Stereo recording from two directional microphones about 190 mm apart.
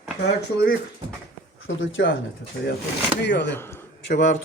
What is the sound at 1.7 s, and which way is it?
Speech, 85° left.